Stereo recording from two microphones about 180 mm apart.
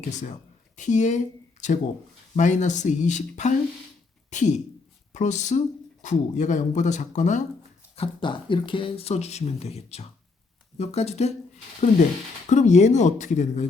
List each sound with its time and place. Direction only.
0.1 s a woman's voice: 40° left (ahead or behind)
7.9 s speech: 30° left (ahead or behind)